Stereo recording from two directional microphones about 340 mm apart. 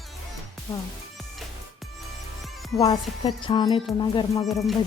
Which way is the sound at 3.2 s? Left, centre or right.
Centre.